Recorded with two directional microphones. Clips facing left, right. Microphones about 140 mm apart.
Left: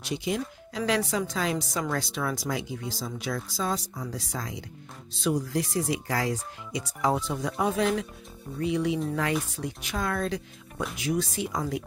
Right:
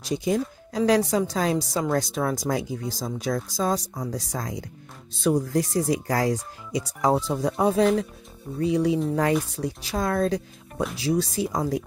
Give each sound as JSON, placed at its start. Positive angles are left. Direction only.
{"t": 0.0, "sound": "speech", "side_deg": -40}